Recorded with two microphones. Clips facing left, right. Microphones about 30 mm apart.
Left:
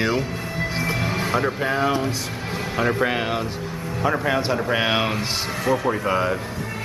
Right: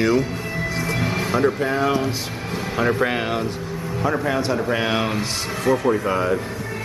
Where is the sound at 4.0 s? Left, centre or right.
Centre.